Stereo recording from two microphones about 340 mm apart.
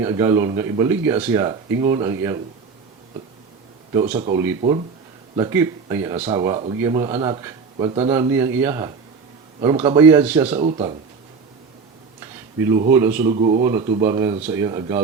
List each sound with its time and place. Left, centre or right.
0.0 s speech: centre
4.0 s speech: centre
10.4 s speech: centre
12.6 s speech: centre
13.3 s speech: centre